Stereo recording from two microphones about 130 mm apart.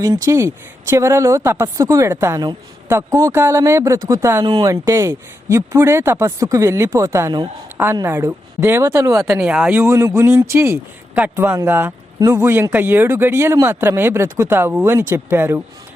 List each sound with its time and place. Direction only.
0.0 s speech: 25° right (ahead or behind)
4.4 s speech: 35° right (ahead or behind)
4.7 s speech: 25° right (ahead or behind)
9.2 s speech: 5° right (ahead or behind)